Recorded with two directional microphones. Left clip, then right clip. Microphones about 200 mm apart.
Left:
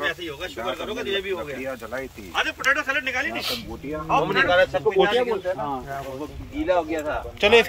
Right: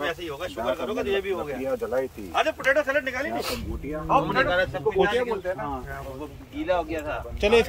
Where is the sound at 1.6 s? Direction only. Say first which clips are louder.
Right 4 dB; 50° right (ahead or behind).